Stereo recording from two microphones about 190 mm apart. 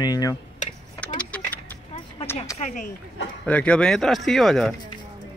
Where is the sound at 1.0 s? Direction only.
5° left (ahead or behind).